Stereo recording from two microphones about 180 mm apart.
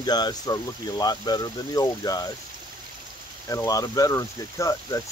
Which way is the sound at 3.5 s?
20° left (ahead or behind).